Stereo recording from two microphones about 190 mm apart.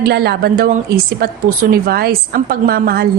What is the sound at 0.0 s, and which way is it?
A woman's voice, 55° right (ahead or behind).